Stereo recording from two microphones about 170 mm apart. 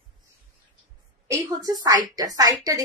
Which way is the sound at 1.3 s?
20° right (ahead or behind).